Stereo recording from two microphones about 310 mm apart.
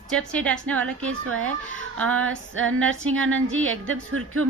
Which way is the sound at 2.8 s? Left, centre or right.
Right.